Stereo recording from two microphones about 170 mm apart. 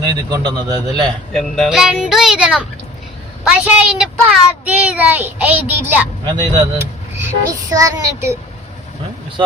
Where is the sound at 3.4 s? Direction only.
10° right (ahead or behind).